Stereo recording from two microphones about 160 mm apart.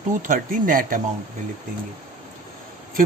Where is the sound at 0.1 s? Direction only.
55° right (ahead or behind).